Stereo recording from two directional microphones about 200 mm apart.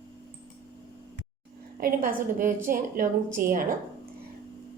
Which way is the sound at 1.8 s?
45° right (ahead or behind).